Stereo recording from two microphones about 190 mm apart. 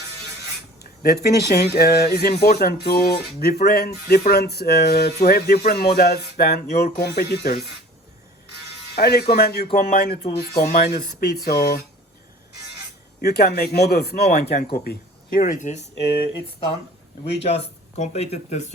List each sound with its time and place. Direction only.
1.0 s speech: 55° left (ahead or behind)
9.0 s speech: 55° left (ahead or behind)
13.2 s speech: 55° left (ahead or behind)
15.4 s speech: 40° left (ahead or behind)
17.4 s speech: 30° left (ahead or behind)